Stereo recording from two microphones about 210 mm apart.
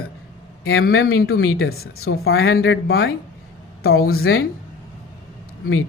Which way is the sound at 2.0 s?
75° left (ahead or behind).